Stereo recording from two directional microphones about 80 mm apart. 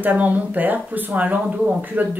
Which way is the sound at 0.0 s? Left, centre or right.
Centre.